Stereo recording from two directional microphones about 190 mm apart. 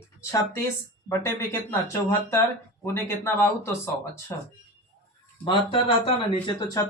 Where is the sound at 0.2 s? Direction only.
15° left (ahead or behind).